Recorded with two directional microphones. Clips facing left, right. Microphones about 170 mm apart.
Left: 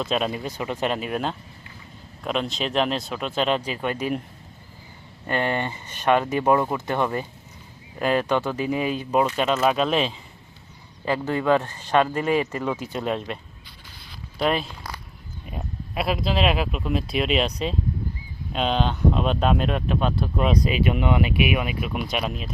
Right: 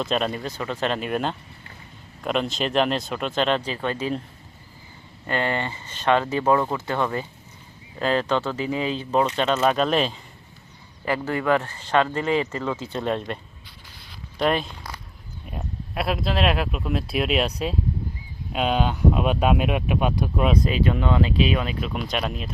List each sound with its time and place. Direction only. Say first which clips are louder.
0.0 s speech: even; 5° left (ahead or behind)
5.2 s speech: left 1 dB; 15° left (ahead or behind); by 10.2 s centre (ahead or behind)
11.0 s speech: left 1 dB; 20° left (ahead or behind); by 20.6 s 5° right (ahead or behind)
20.7 s speech: even; 15° left (ahead or behind)